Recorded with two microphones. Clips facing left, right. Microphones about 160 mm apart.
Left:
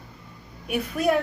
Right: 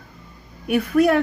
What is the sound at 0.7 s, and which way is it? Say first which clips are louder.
Speech: right 6 dB; 60° right (ahead or behind).